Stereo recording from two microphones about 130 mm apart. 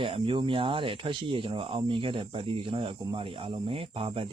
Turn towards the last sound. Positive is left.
turn(degrees=-45)  # may be behind; listen again after turning